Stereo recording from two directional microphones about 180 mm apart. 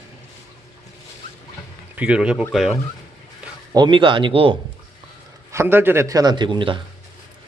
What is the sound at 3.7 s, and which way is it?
Speech, 25° right (ahead or behind).